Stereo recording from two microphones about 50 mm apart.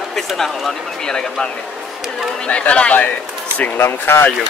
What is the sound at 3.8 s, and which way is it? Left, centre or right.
Speech, left.